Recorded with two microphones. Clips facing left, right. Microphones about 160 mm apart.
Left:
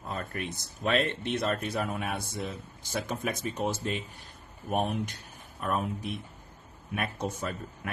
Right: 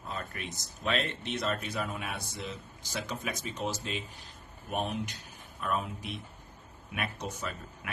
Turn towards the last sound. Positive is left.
turn(degrees=50)  # may be behind; listen again after turning